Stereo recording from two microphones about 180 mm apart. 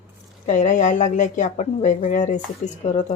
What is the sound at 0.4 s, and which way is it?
Speech, 45° left (ahead or behind).